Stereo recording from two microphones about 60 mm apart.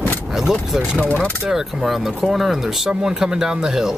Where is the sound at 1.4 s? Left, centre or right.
Centre.